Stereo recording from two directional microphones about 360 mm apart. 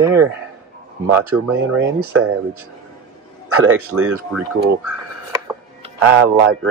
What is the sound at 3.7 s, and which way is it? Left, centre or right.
Speech, centre.